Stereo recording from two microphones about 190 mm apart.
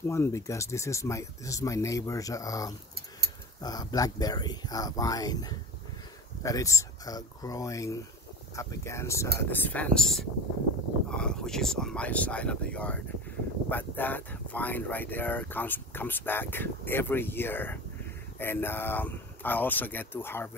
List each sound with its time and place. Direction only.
0.0 s speech: 15° left (ahead or behind)